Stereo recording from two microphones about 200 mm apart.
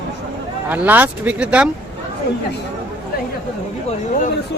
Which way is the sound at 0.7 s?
10° right (ahead or behind).